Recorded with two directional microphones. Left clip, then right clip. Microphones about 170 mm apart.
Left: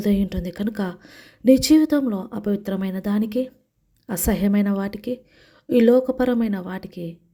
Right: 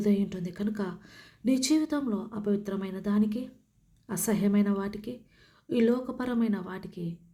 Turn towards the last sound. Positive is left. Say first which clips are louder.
# left 7 dB
turn(degrees=40)  # may be behind; listen again after turning